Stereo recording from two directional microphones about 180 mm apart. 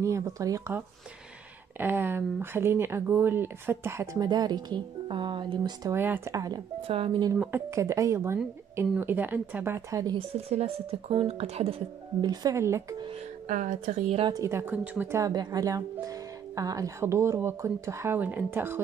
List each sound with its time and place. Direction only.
0.0 s speech: 15° right (ahead or behind)
7.3 s speech: 15° right (ahead or behind)
10.1 s speech: 35° right (ahead or behind)
12.2 s speech: 20° right (ahead or behind)
13.5 s speech: 45° right (ahead or behind)
14.2 s speech: 20° right (ahead or behind)